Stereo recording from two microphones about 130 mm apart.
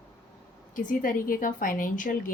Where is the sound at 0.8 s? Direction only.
90° left.